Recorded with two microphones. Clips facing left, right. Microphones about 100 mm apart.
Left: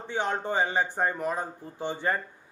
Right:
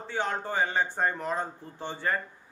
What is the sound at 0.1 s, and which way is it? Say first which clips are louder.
A man's voice: left 2 dB; 20° left (ahead or behind).